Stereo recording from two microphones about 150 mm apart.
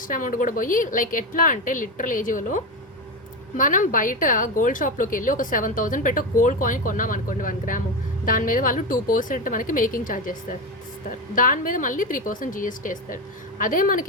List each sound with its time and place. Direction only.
0.1 s a woman's voice: 65° left (ahead or behind)
3.6 s a woman's voice: 60° left (ahead or behind)
11.3 s a woman's voice: 65° left (ahead or behind)